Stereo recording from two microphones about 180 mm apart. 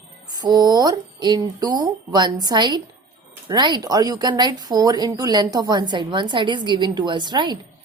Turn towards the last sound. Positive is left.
turn(degrees=-25)  # may be behind; listen again after turning